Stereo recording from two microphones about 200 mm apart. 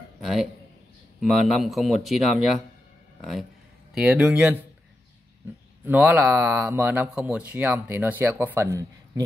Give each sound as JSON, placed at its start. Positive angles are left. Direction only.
{"t": 0.2, "sound": "a man's voice", "side_deg": 0}
{"t": 5.9, "sound": "speech", "side_deg": -10}